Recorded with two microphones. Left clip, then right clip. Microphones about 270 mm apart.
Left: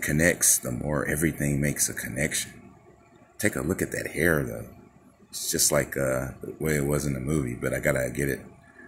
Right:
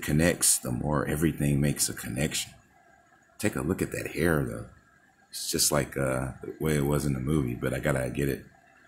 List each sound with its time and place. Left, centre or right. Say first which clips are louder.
0.1 s speech: left 2 dB; centre